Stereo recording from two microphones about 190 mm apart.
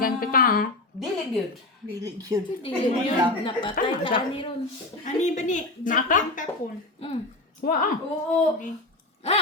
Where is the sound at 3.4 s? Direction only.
25° left (ahead or behind).